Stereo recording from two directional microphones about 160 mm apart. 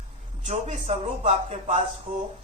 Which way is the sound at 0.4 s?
45° right (ahead or behind).